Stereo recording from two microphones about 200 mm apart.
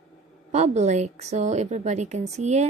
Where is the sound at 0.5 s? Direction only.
35° right (ahead or behind).